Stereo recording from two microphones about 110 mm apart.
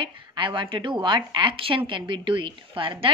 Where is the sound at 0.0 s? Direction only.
50° right (ahead or behind).